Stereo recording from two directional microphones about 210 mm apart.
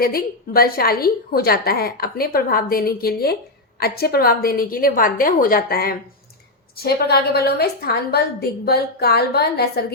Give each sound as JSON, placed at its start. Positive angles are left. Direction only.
{"t": 0.0, "sound": "a woman's voice", "side_deg": 45}